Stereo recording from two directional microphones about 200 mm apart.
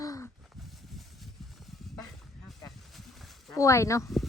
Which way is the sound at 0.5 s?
Centre (ahead or behind).